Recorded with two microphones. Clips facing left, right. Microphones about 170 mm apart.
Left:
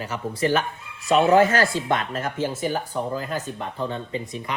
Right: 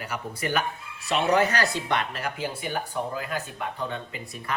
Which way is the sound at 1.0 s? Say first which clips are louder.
Left 6 dB; 45° left (ahead or behind).